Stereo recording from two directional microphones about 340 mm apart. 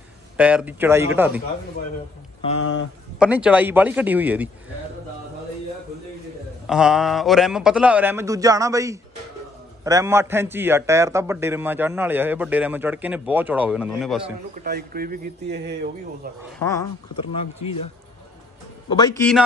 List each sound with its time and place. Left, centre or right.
0.4 s a man's voice: centre
2.6 s speech: left
3.2 s a man's voice: centre
6.7 s a man's voice: centre
14.2 s a man's voice: right
16.5 s speech: centre
18.9 s speech: centre